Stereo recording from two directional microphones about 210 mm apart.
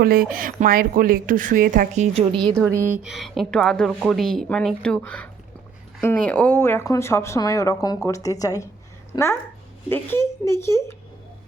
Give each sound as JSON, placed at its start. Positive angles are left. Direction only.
{"t": 0.0, "sound": "speech", "side_deg": -45}
{"t": 2.6, "sound": "a woman's voice", "side_deg": -10}